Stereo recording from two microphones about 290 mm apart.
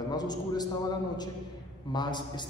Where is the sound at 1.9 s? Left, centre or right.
Centre.